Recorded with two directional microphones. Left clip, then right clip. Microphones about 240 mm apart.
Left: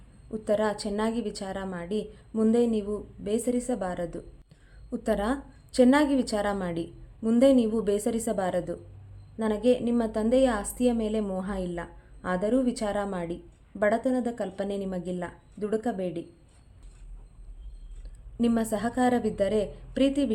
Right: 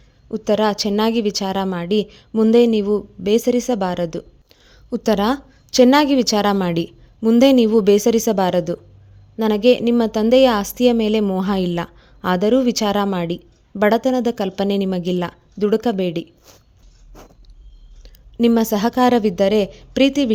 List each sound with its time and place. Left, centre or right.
0.3 s a woman's voice: right
18.0 s a woman's voice: right